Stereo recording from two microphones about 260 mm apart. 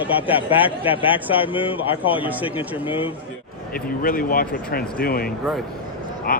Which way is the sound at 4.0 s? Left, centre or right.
Left.